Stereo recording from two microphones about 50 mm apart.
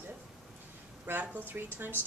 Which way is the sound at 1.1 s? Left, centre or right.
Right.